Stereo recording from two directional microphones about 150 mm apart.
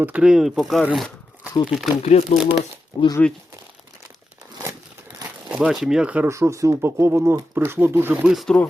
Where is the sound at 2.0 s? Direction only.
45° left (ahead or behind).